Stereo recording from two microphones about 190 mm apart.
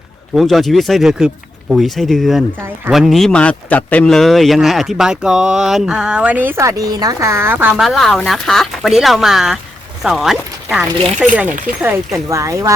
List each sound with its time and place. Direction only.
0.3 s speech: centre (ahead or behind)
7.9 s speech: centre (ahead or behind); by 12.7 s 15° right (ahead or behind)